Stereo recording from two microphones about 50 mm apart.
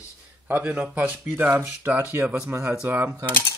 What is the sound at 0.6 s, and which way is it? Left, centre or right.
Speech, right.